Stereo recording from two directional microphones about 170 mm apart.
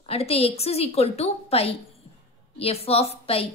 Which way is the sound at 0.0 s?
35° left (ahead or behind).